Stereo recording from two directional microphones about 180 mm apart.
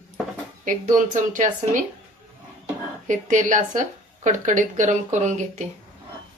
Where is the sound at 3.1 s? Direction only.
45° right (ahead or behind).